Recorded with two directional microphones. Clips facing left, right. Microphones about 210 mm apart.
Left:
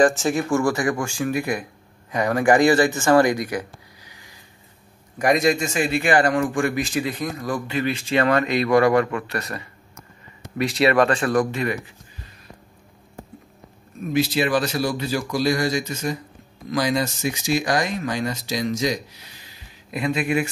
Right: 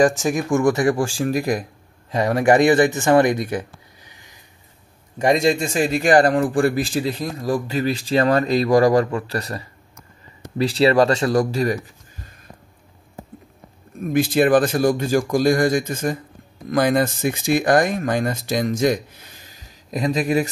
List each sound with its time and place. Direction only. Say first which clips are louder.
0.0 s speech: right 1 dB; 10° right (ahead or behind); by 1.7 s 35° right (ahead or behind)
2.1 s a man's voice: right 2 dB; 25° right (ahead or behind); by 12.3 s 40° right (ahead or behind)
14.1 s speech: right 5 dB; 50° right (ahead or behind)